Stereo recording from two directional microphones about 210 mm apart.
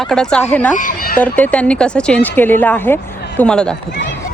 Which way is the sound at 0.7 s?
40° left (ahead or behind).